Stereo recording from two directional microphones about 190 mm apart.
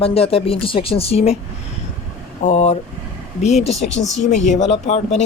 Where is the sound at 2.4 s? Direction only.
35° left (ahead or behind).